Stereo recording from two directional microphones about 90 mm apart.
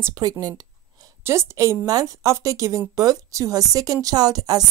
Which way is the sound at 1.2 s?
30° right (ahead or behind).